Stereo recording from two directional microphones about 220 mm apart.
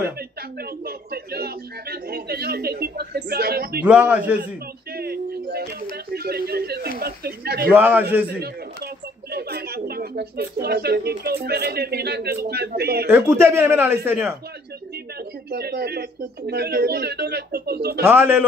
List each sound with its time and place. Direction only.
0.8 s speech: 45° right (ahead or behind)
3.8 s speech: 5° right (ahead or behind)
4.9 s speech: 45° right (ahead or behind)
7.7 s speech: 10° right (ahead or behind)
9.3 s speech: 45° right (ahead or behind)
13.1 s speech: 10° right (ahead or behind)
15.5 s speech: 45° right (ahead or behind)
18.0 s speech: 10° right (ahead or behind)